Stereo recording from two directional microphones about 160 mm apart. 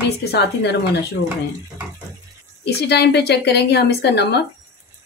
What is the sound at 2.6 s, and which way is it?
A woman's voice, 90° left.